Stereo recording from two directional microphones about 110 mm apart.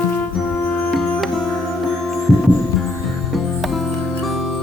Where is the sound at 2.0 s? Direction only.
Centre (ahead or behind).